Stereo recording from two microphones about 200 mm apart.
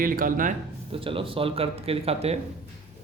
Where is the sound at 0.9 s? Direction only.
25° right (ahead or behind).